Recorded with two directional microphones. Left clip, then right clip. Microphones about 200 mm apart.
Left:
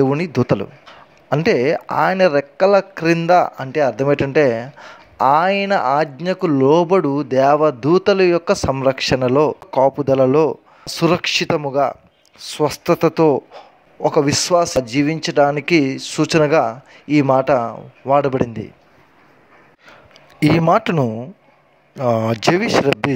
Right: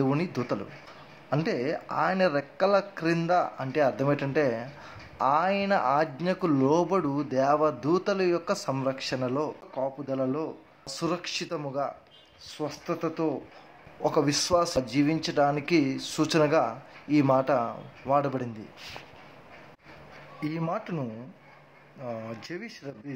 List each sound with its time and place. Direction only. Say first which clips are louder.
0.0 s a man's voice: left 11 dB; 35° left (ahead or behind)
12.4 s speech: left 16 dB; 50° left (ahead or behind)
14.0 s a man's voice: left 10 dB; 35° left (ahead or behind)
20.3 s speech: left 18 dB; 50° left (ahead or behind)